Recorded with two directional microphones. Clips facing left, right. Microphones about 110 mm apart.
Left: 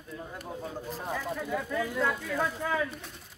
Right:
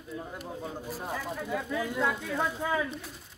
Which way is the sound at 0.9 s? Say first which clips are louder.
Left 2 dB; 10° right (ahead or behind).